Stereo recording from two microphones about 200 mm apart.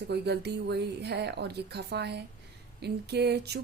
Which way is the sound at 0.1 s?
55° right (ahead or behind).